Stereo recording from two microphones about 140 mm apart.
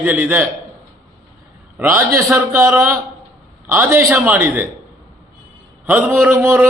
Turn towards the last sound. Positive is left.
turn(degrees=-15)  # may be behind; listen again after turning